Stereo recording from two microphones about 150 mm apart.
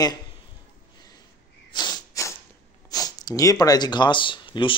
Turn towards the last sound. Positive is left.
turn(degrees=35)  # may be behind; listen again after turning